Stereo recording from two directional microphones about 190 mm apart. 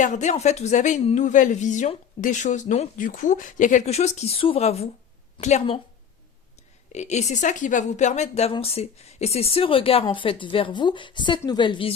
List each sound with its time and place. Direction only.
0.0 s speech: 40° left (ahead or behind)
6.9 s speech: 35° left (ahead or behind)